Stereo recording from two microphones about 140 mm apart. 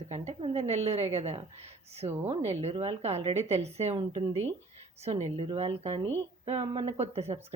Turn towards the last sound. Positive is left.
turn(degrees=-50)  # may be behind; listen again after turning